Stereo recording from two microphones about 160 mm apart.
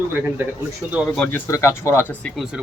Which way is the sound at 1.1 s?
5° left (ahead or behind).